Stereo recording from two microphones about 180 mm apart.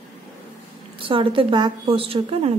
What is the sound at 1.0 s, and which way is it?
A woman's voice, 30° right (ahead or behind).